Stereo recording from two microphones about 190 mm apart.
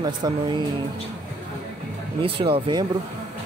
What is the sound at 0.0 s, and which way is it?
Speech, 25° right (ahead or behind).